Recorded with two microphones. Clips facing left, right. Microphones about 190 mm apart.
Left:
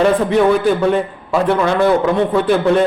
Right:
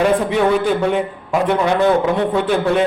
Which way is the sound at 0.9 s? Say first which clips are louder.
Left 2 dB; 15° right (ahead or behind).